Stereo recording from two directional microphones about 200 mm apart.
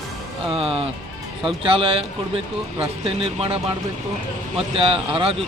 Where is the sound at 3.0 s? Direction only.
30° right (ahead or behind).